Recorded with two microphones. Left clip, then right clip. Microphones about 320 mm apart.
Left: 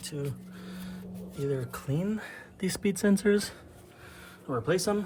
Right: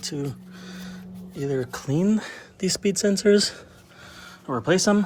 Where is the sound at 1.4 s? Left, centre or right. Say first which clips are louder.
Right 6 dB; centre.